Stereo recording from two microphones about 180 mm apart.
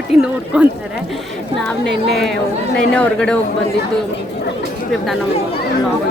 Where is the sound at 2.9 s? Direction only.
5° left (ahead or behind).